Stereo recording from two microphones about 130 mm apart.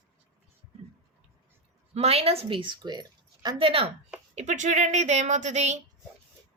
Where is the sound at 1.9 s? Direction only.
50° right (ahead or behind).